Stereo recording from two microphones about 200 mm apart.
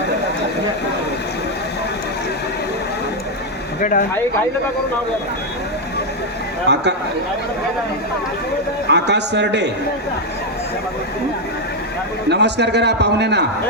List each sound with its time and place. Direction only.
3.8 s speech: 40° left (ahead or behind)
6.7 s a man's voice: 60° right (ahead or behind)
8.9 s a man's voice: 60° right (ahead or behind)
12.3 s a man's voice: 60° right (ahead or behind)